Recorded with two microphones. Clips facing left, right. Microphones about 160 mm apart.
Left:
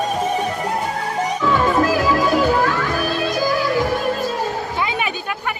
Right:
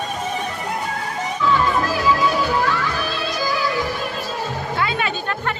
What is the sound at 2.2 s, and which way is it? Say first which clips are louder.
Music: left 3 dB; 45° left (ahead or behind).